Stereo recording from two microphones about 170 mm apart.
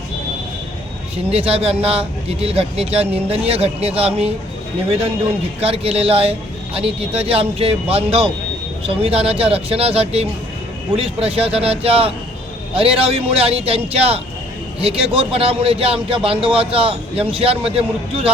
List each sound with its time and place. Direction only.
1.3 s a man's voice: 35° right (ahead or behind)